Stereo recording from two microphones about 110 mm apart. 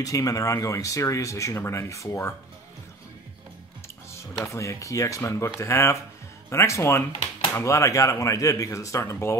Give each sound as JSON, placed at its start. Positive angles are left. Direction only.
{"t": 0.0, "sound": "speech", "side_deg": 30}
{"t": 4.5, "sound": "speech", "side_deg": 30}